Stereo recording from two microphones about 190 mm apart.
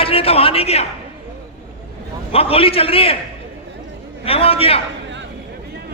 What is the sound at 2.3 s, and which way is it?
Speech, 30° left (ahead or behind).